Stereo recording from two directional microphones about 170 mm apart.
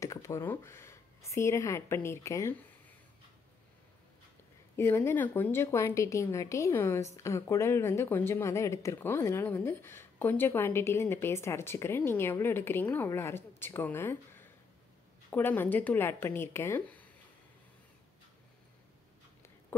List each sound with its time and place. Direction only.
0.0 s speech: 15° left (ahead or behind)
4.7 s speech: 15° left (ahead or behind)